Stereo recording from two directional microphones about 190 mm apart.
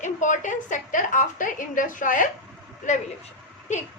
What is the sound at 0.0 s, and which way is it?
A woman's voice, 40° left (ahead or behind).